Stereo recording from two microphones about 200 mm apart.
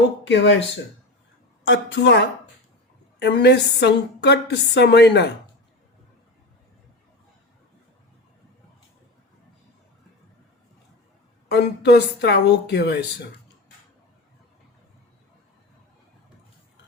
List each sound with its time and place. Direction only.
0.3 s a woman's voice: 65° left (ahead or behind)
1.6 s a woman's voice: 65° left (ahead or behind)
11.5 s a woman's voice: 55° left (ahead or behind)